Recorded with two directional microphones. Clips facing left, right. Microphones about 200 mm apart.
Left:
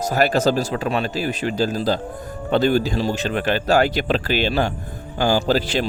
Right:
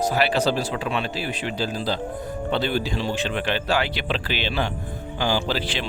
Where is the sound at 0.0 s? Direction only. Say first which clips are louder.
Left 3 dB; 45° left (ahead or behind).